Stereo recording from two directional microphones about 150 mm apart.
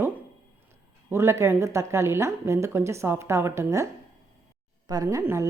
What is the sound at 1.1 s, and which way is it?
A woman's voice, 20° right (ahead or behind).